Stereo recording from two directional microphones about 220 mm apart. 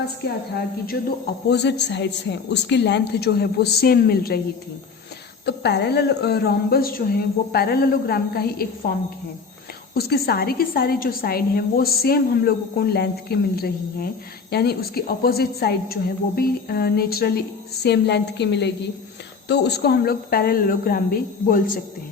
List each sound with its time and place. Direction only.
1.5 s a woman's voice: 50° left (ahead or behind)
5.5 s a woman's voice: 50° left (ahead or behind)